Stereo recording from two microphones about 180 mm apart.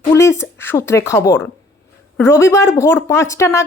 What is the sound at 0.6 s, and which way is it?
A woman's voice, 15° left (ahead or behind).